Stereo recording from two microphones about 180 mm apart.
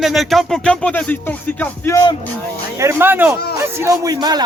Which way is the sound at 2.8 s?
10° right (ahead or behind).